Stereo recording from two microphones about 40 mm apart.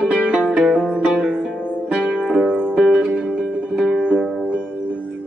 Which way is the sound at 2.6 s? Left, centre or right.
Right.